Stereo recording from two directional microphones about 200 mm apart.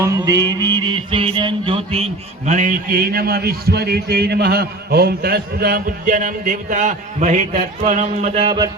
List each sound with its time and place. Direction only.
0.0 s mantra: 15° right (ahead or behind)
2.5 s a man's voice: 40° right (ahead or behind); by 8.7 s 25° right (ahead or behind)